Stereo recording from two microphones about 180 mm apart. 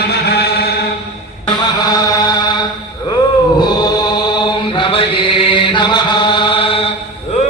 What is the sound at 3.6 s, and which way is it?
Chant, 25° left (ahead or behind).